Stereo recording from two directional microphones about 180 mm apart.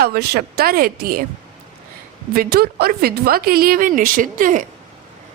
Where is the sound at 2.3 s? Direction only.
55° right (ahead or behind).